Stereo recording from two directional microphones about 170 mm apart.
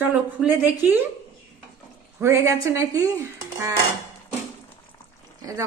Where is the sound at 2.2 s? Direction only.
15° right (ahead or behind).